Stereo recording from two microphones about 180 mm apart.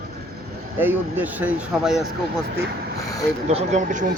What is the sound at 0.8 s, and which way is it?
Speech, 10° right (ahead or behind).